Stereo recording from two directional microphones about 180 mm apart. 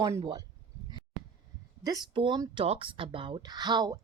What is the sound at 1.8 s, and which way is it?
Speech, 25° right (ahead or behind).